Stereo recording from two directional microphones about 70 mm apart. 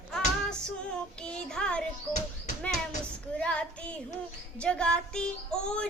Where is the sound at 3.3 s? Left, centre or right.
Centre.